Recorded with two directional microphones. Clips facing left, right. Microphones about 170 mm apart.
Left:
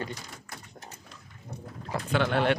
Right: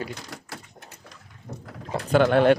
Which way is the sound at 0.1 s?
85° right.